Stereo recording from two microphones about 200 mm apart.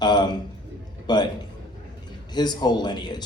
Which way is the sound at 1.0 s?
20° left (ahead or behind).